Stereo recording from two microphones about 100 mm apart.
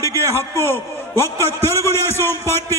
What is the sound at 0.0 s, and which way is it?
A man's voice, 25° left (ahead or behind).